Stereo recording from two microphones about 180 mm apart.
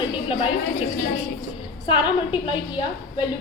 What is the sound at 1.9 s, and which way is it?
A woman's voice, 30° left (ahead or behind).